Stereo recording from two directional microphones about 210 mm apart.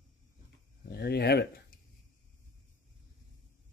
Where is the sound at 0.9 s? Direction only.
50° left (ahead or behind).